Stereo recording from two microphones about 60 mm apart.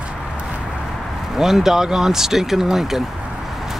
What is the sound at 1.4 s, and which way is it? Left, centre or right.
Speech, centre.